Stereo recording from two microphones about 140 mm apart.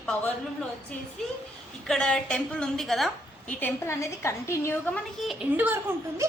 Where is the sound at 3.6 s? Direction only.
20° left (ahead or behind).